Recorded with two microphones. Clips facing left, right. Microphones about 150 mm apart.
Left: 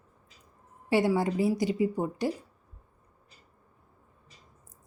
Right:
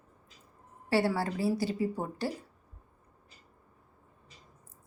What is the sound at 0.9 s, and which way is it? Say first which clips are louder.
A woman's voice: left 3 dB; 15° left (ahead or behind).